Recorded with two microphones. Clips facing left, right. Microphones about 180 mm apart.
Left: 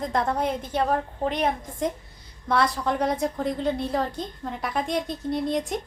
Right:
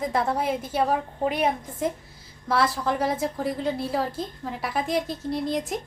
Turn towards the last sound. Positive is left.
turn(degrees=0)  # may be behind; listen again after turning